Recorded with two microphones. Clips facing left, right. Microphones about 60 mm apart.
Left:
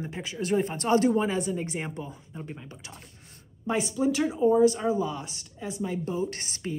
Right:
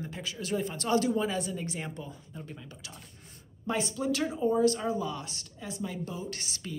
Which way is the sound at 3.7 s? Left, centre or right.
Centre.